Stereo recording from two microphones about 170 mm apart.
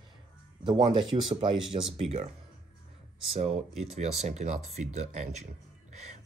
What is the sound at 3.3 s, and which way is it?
Speech, 40° right (ahead or behind).